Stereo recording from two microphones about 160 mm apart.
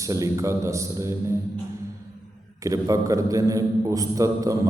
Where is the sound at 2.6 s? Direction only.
20° right (ahead or behind).